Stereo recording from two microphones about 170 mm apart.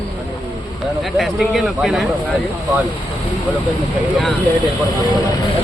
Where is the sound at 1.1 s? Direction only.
Centre (ahead or behind).